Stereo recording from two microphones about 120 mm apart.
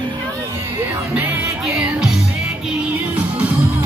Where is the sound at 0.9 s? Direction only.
15° right (ahead or behind).